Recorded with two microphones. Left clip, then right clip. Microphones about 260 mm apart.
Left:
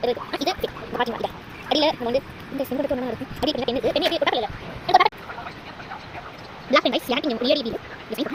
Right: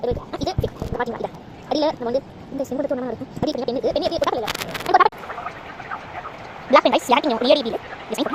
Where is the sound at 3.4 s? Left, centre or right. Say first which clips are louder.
Right 1 dB; centre.